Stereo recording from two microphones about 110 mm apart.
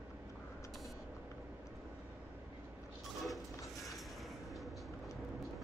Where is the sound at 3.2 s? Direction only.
Centre (ahead or behind).